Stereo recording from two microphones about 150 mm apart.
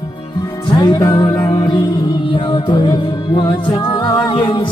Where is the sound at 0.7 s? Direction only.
30° left (ahead or behind).